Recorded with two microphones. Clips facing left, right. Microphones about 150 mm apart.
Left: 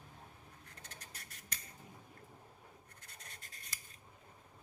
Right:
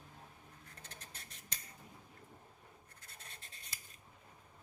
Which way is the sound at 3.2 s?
25° right (ahead or behind).